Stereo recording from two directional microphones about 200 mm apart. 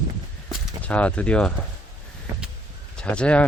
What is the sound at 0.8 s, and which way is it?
Speech, 5° left (ahead or behind).